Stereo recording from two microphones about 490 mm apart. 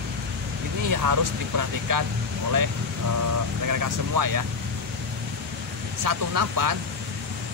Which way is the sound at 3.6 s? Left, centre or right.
Right.